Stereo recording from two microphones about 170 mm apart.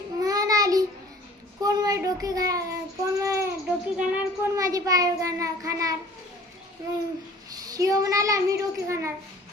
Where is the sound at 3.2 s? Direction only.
15° right (ahead or behind).